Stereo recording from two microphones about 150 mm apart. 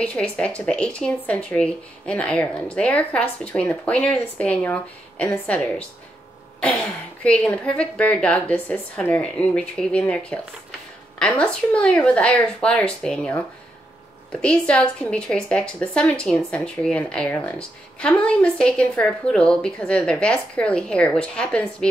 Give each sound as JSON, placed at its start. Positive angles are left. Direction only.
{"t": 0.0, "sound": "a woman's voice", "side_deg": 5}